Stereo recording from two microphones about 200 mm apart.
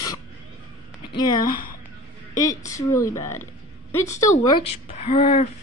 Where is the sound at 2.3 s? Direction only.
15° left (ahead or behind).